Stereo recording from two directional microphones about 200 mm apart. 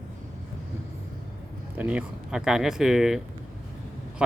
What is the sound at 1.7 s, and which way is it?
Speech, 5° right (ahead or behind).